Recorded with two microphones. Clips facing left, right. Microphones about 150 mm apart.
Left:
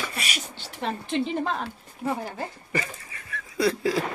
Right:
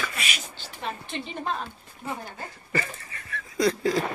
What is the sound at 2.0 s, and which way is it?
Speech, 35° left (ahead or behind).